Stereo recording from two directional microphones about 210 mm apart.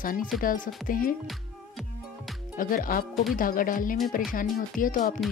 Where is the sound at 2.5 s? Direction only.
40° left (ahead or behind).